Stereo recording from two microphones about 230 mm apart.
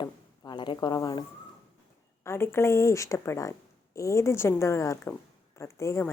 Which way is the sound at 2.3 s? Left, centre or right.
Centre.